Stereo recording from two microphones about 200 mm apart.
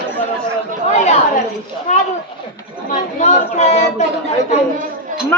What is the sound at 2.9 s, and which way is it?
A woman's voice, 35° left (ahead or behind).